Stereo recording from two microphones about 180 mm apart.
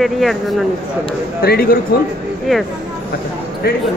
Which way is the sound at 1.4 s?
55° left (ahead or behind).